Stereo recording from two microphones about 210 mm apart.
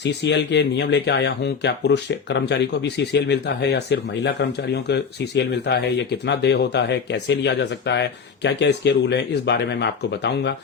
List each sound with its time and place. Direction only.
0.0 s speech: 55° left (ahead or behind)